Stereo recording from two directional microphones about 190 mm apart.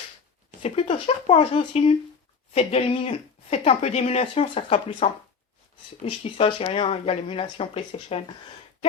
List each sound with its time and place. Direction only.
0.6 s speech: 30° left (ahead or behind)